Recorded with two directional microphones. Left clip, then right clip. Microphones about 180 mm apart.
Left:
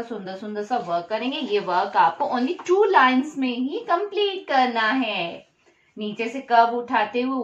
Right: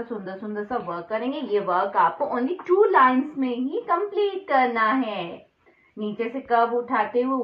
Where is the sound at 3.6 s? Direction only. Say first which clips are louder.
Left 1 dB; 40° left (ahead or behind).